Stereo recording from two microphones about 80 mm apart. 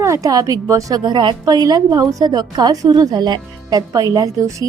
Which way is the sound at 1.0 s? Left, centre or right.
Right.